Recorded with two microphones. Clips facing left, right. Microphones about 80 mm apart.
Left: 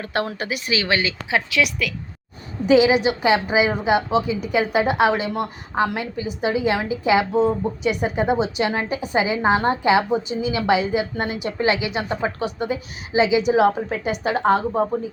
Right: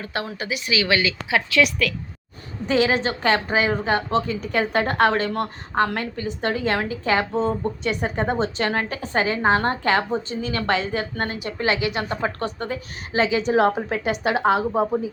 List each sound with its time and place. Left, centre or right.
0.0 s a woman's voice: left
1.5 s a woman's voice: centre
11.3 s a woman's voice: left; by 15.1 s centre